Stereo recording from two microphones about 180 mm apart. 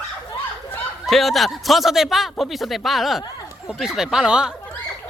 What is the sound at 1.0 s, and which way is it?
Speech, centre (ahead or behind).